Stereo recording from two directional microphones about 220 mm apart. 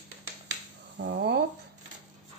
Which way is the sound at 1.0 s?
50° right (ahead or behind).